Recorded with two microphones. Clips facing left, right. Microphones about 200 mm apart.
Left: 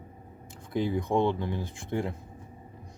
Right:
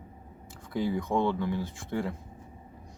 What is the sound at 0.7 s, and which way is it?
Speech, 20° left (ahead or behind).